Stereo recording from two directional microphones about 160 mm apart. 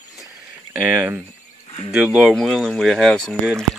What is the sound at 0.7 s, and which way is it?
Speech, 10° right (ahead or behind).